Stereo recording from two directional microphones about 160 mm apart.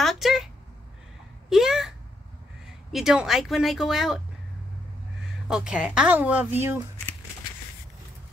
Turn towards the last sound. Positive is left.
turn(degrees=-15)  # may be behind; listen again after turning